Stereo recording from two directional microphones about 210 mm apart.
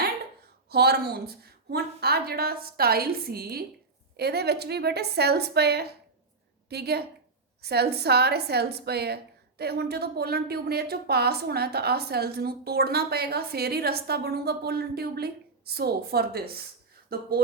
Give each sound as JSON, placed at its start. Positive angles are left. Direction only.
{"t": 0.7, "sound": "a woman's voice", "side_deg": -50}